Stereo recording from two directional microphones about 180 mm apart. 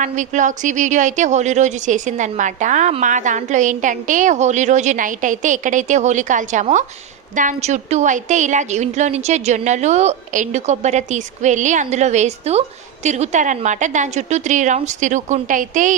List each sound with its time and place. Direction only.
0.0 s a woman's voice: 45° right (ahead or behind)